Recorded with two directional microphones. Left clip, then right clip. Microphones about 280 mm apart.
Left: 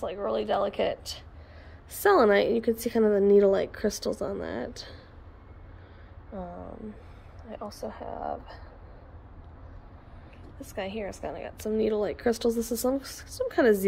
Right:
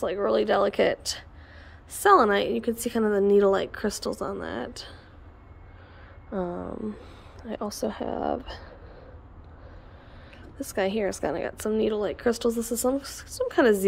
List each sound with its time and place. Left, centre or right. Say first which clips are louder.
0.0 s a woman's voice: right 5 dB; centre
2.0 s a woman's voice: right 2 dB; centre
6.3 s speech: right 8 dB; right
7.7 s speech: right 8 dB; right
10.6 s a woman's voice: right 8 dB; centre